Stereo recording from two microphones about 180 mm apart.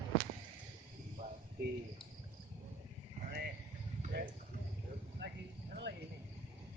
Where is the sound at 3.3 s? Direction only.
60° right (ahead or behind).